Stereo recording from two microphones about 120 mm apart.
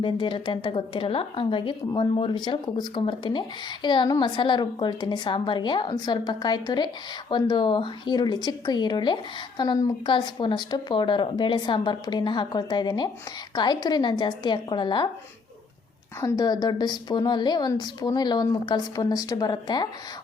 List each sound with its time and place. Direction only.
0.0 s speech: 45° left (ahead or behind)
16.2 s speech: 35° left (ahead or behind)